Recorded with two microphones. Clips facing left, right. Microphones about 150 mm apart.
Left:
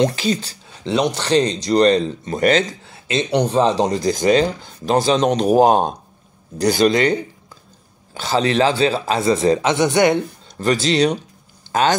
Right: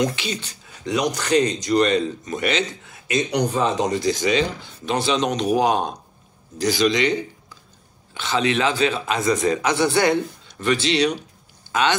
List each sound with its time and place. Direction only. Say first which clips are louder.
0.0 s speech: left 6 dB; 40° left (ahead or behind)
2.9 s speech: left 3 dB; 30° left (ahead or behind)
6.6 s speech: left 4 dB; 55° left (ahead or behind)
8.1 s speech: left 3 dB; 40° left (ahead or behind); by 10.1 s 20° left (ahead or behind)
10.6 s speech: left 3 dB; 40° left (ahead or behind)